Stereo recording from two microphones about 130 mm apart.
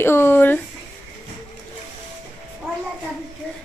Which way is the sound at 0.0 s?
20° left (ahead or behind).